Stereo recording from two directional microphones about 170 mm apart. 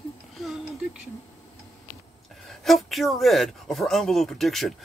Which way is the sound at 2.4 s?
Centre (ahead or behind).